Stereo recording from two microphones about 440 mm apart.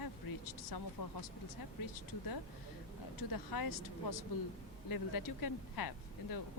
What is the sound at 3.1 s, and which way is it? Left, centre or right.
Speech, left.